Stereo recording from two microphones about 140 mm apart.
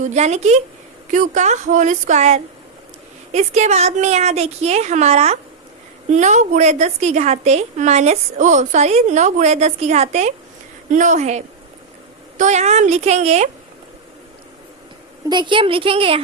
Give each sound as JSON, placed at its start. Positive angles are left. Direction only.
{"t": 0.0, "sound": "a woman's voice", "side_deg": -55}
{"t": 1.1, "sound": "a woman's voice", "side_deg": -65}
{"t": 15.3, "sound": "a woman's voice", "side_deg": -35}